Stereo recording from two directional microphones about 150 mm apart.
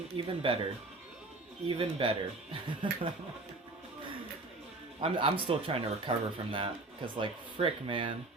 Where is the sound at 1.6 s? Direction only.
35° right (ahead or behind).